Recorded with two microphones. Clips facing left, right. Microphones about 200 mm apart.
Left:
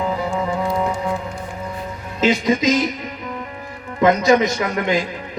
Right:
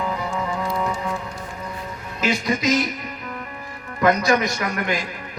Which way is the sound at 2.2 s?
20° left (ahead or behind).